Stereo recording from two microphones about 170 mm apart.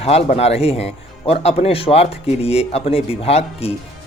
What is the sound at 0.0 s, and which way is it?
Speech, 35° left (ahead or behind).